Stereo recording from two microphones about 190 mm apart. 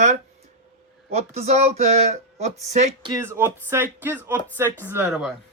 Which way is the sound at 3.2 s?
10° right (ahead or behind).